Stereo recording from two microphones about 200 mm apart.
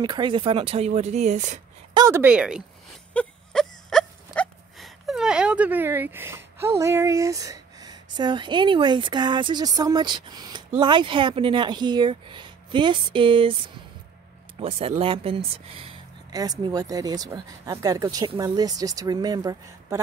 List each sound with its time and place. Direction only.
0.0 s speech: 25° right (ahead or behind)
2.0 s speech: 15° right (ahead or behind)
3.1 s wail: 5° left (ahead or behind); by 10.6 s 20° right (ahead or behind)
10.7 s speech: 25° right (ahead or behind)
14.6 s speech: 30° right (ahead or behind)